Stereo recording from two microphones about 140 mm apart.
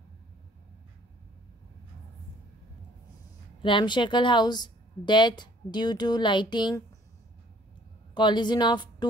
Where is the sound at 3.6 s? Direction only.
35° left (ahead or behind).